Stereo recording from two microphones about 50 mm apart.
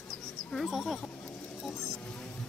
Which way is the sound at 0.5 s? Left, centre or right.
Centre.